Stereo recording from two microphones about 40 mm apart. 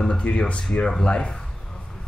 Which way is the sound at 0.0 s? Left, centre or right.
Left.